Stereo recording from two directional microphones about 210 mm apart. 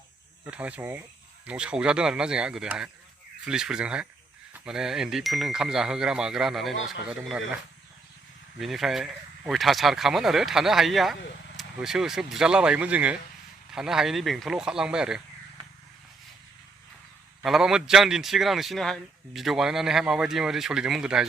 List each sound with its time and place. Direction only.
0.4 s a man's voice: 5° right (ahead or behind)
17.4 s a man's voice: centre (ahead or behind)